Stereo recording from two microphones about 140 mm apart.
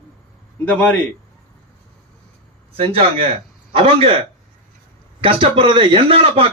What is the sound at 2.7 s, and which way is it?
Speech, 40° right (ahead or behind).